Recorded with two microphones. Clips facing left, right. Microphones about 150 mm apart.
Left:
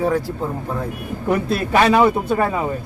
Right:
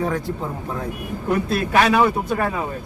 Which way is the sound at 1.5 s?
30° left (ahead or behind).